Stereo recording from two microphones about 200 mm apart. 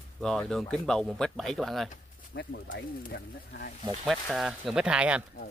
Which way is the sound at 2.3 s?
55° left (ahead or behind).